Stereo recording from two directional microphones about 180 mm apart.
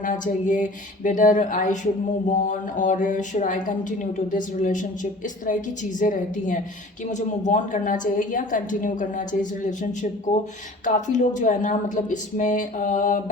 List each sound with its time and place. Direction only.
0.0 s speech: 45° left (ahead or behind)